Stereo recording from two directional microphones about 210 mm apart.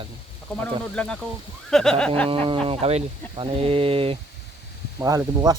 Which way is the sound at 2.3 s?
25° right (ahead or behind).